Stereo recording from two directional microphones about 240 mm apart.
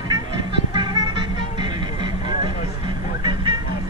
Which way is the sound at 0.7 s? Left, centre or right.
Centre.